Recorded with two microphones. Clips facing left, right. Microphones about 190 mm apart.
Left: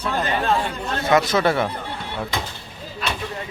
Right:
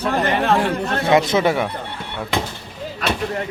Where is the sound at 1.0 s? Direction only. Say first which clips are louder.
Right 2 dB; 25° right (ahead or behind).